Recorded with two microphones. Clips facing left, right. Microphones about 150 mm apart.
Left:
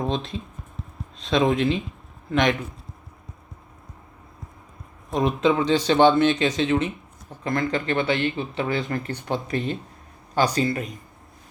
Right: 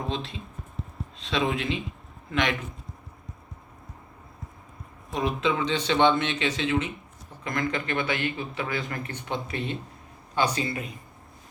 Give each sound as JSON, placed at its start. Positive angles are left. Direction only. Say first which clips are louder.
{"t": 1.2, "sound": "speech", "louder": "left 7 dB", "side_deg": 40}
{"t": 5.1, "sound": "speech", "louder": "left 6 dB", "side_deg": 40}